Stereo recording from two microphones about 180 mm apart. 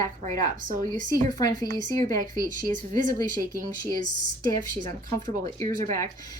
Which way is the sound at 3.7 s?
20° left (ahead or behind).